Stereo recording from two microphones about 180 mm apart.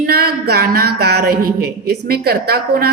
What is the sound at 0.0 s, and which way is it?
A woman's voice, 60° right (ahead or behind).